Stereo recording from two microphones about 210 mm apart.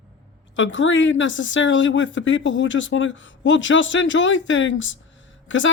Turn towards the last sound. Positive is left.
turn(degrees=65)  # may be behind; listen again after turning